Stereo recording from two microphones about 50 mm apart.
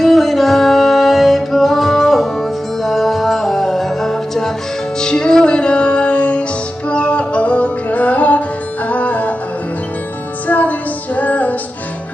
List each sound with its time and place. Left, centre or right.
0.0 s music: centre; by 9.3 s left
10.5 s music: left